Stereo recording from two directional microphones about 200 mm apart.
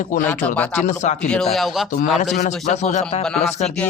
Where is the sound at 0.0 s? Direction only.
40° left (ahead or behind).